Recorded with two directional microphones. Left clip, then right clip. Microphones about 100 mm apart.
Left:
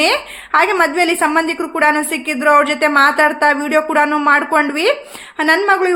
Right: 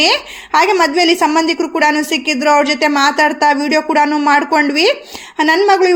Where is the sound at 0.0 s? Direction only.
30° right (ahead or behind).